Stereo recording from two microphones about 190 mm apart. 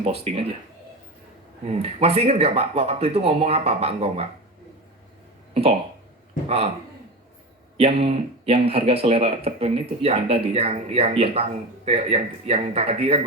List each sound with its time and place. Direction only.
0.0 s speech: 30° right (ahead or behind)
1.6 s speech: 30° right (ahead or behind)
7.8 s speech: 30° right (ahead or behind)